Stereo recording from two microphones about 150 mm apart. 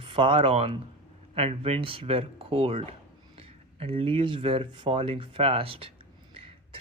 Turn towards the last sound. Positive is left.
turn(degrees=-35)  # may be behind; listen again after turning